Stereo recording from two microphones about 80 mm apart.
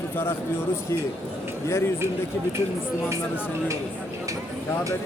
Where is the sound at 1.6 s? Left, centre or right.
Left.